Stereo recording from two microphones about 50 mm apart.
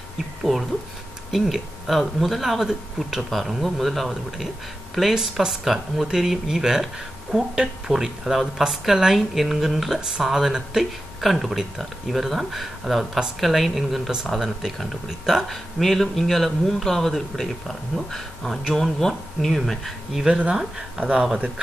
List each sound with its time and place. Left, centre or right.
0.4 s a man's voice: centre
20.3 s speech: centre